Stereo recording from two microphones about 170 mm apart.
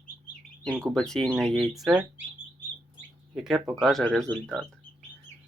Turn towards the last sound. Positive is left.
turn(degrees=5)  # may be behind; listen again after turning